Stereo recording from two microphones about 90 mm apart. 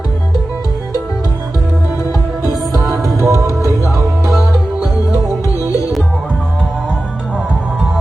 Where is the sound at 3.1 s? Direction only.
35° right (ahead or behind).